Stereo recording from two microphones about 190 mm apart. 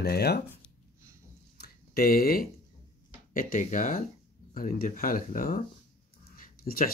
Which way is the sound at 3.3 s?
40° left (ahead or behind).